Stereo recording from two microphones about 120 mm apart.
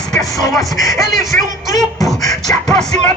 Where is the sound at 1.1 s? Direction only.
25° left (ahead or behind).